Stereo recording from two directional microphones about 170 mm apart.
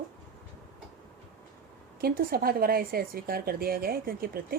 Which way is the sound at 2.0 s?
60° right (ahead or behind).